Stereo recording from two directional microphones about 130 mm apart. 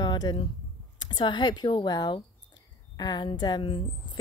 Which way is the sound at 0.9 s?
35° left (ahead or behind).